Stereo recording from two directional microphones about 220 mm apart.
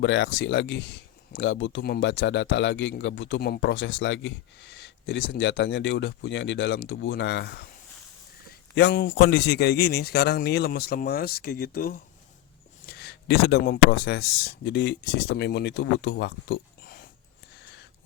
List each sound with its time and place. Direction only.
0.0 s a man's voice: 50° left (ahead or behind)
8.7 s a man's voice: 50° left (ahead or behind)